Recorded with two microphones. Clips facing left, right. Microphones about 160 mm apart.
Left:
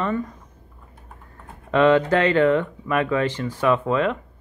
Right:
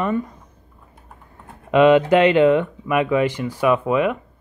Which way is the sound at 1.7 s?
15° right (ahead or behind).